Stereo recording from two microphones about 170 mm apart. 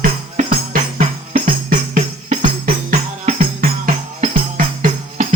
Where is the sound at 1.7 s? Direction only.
55° right (ahead or behind).